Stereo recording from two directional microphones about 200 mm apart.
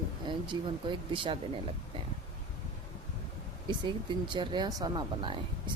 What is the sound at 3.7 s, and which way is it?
Speech, 25° right (ahead or behind).